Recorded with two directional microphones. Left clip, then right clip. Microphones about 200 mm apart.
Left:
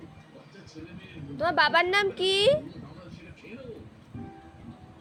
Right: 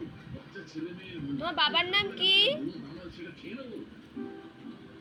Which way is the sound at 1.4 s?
65° left (ahead or behind).